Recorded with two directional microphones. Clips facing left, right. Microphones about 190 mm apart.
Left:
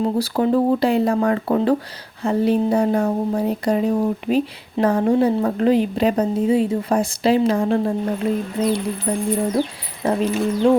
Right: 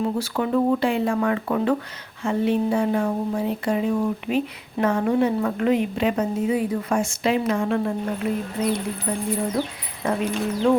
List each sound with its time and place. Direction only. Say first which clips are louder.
0.0 s speech: left 5 dB; 35° left (ahead or behind)